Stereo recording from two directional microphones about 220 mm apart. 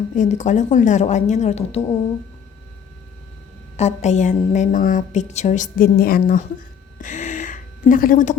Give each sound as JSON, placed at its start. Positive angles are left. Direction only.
{"t": 0.2, "sound": "a woman's voice", "side_deg": 35}
{"t": 3.8, "sound": "a woman's voice", "side_deg": 30}
{"t": 7.0, "sound": "gasp", "side_deg": 35}